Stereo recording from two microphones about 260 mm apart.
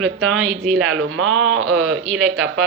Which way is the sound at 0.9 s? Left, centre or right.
Right.